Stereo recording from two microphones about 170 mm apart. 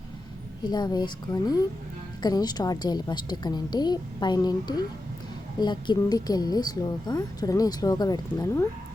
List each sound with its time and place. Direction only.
0.7 s speech: 25° left (ahead or behind)